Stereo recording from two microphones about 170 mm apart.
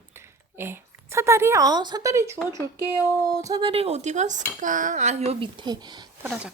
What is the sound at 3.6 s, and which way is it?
Dishes, 35° right (ahead or behind).